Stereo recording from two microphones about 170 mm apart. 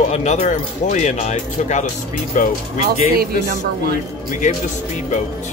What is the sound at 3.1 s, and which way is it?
Speech, 60° right (ahead or behind).